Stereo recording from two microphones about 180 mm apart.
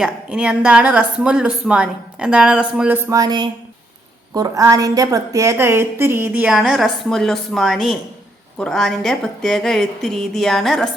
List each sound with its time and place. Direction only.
0.0 s a woman's voice: 5° right (ahead or behind)
3.1 s a woman's voice: 20° right (ahead or behind); by 10.8 s centre (ahead or behind)